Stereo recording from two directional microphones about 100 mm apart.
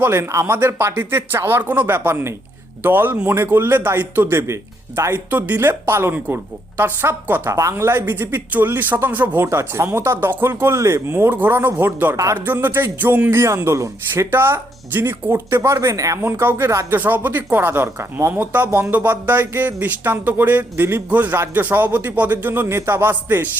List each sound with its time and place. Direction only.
0.0 s speech: 25° right (ahead or behind)